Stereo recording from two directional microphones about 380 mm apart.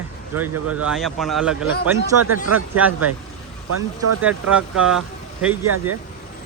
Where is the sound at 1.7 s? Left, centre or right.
Left.